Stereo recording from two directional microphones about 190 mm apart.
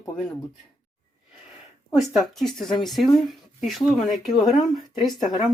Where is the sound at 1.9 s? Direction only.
Centre (ahead or behind).